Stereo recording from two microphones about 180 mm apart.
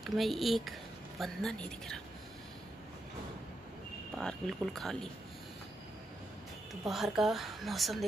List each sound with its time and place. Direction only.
0.0 s speech: centre (ahead or behind)
4.2 s speech: centre (ahead or behind)
6.7 s speech: centre (ahead or behind)